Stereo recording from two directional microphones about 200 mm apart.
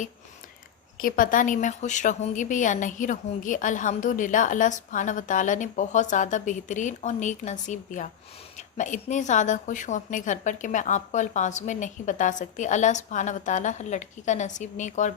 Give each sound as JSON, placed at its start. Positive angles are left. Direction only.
{"t": 0.9, "sound": "a woman's voice", "side_deg": 45}